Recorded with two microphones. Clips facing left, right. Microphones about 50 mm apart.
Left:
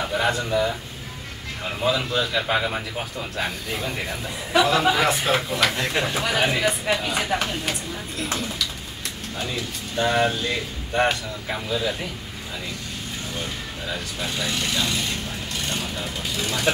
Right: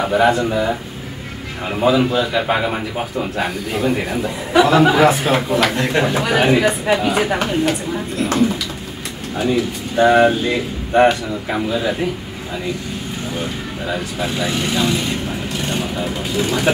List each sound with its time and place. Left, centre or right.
0.0 s speech: centre
1.8 s speech: centre
4.6 s speech: centre
9.4 s speech: centre
13.4 s speech: centre